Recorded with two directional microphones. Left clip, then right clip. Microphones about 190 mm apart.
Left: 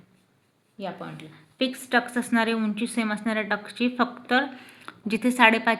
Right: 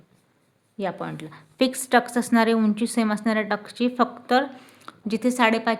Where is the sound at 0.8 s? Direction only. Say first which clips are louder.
Right 6 dB; 55° right (ahead or behind).